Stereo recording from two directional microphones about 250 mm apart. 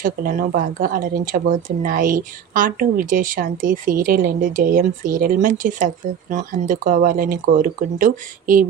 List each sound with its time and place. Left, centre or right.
0.0 s speech: right